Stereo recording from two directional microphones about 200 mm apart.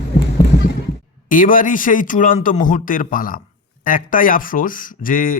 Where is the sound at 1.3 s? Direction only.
40° left (ahead or behind).